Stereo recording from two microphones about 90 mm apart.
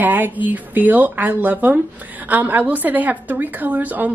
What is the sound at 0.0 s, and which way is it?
A woman's voice, 20° right (ahead or behind).